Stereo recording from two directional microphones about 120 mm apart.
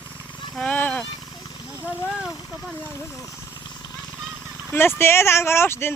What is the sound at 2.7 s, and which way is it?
Speech, 20° left (ahead or behind).